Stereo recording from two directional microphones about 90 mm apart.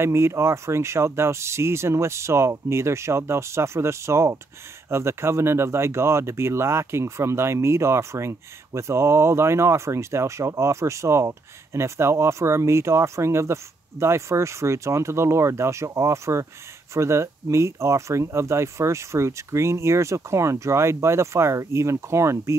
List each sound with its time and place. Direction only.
0.0 s speech: 30° right (ahead or behind)